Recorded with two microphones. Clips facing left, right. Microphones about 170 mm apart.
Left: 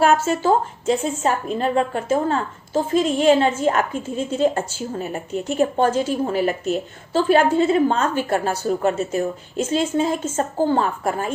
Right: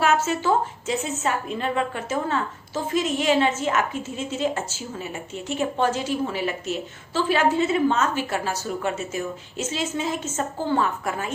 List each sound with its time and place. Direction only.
0.0 s a woman's voice: 35° left (ahead or behind)
3.3 s a woman's voice: 50° left (ahead or behind)
3.6 s a woman's voice: 35° left (ahead or behind)
7.6 s a woman's voice: 30° left (ahead or behind)
8.1 s a woman's voice: 50° left (ahead or behind)
9.6 s a woman's voice: 55° left (ahead or behind)
10.0 s a woman's voice: 35° left (ahead or behind)